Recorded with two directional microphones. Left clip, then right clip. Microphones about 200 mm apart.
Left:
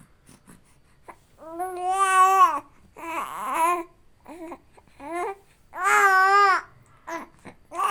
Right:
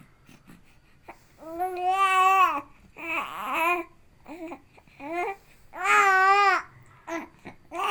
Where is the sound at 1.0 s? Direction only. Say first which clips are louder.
Even; 15° left (ahead or behind).